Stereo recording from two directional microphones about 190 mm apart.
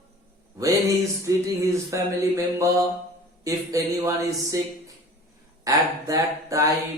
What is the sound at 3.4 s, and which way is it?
Speech, 15° right (ahead or behind).